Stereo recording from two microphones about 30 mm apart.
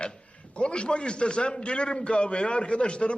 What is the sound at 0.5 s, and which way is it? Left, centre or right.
A man's voice, left.